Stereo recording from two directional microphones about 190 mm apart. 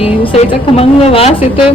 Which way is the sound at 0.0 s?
30° left (ahead or behind).